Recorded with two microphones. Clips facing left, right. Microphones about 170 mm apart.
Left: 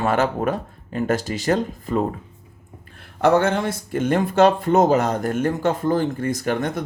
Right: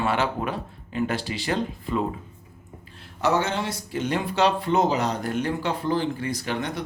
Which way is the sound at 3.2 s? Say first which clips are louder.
Left 6 dB; 55° left (ahead or behind).